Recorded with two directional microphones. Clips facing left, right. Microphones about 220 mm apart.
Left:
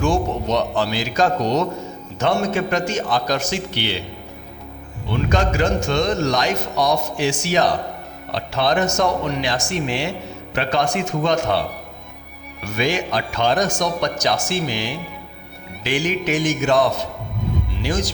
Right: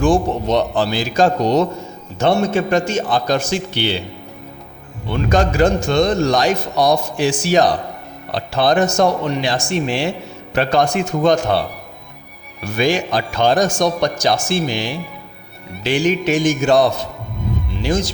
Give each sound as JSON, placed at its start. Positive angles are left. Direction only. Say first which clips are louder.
{"t": 0.0, "sound": "a man's voice", "louder": "right 4 dB", "side_deg": -30}
{"t": 5.3, "sound": "a man's voice", "louder": "right 5 dB", "side_deg": -35}
{"t": 12.6, "sound": "a man's voice", "louder": "right 4 dB", "side_deg": -35}